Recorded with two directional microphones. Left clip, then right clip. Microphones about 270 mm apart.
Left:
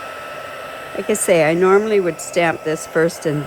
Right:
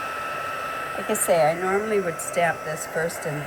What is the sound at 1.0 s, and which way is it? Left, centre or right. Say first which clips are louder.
Speech: left 5 dB; left.